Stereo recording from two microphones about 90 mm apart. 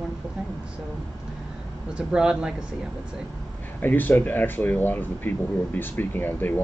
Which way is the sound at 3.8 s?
20° left (ahead or behind).